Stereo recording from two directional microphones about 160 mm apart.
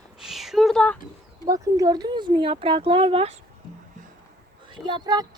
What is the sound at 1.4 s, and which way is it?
Speech, 20° right (ahead or behind).